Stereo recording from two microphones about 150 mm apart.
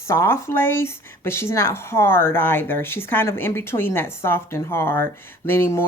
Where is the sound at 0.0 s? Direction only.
20° left (ahead or behind).